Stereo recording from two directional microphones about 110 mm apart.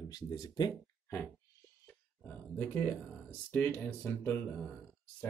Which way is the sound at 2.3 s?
15° left (ahead or behind).